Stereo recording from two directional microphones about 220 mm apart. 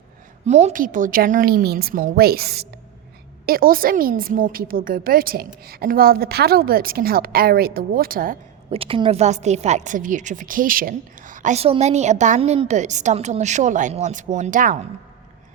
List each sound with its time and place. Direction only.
0.4 s a woman's voice: 30° right (ahead or behind)
8.7 s a woman's voice: 25° right (ahead or behind)